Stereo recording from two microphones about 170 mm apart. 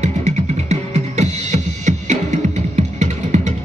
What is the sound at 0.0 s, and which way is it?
Music, 40° right (ahead or behind).